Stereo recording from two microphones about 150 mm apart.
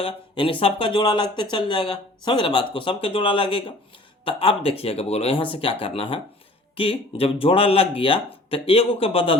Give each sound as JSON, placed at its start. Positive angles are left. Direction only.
{"t": 0.0, "sound": "speech", "side_deg": 35}